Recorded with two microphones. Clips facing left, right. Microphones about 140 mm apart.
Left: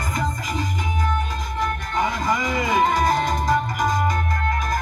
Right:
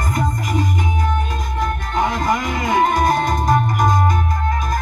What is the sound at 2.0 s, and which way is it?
Music, 65° right (ahead or behind).